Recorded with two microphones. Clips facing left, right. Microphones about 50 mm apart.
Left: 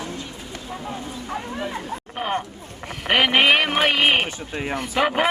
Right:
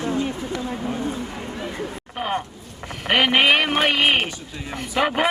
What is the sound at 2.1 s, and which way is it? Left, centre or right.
A man's voice, centre.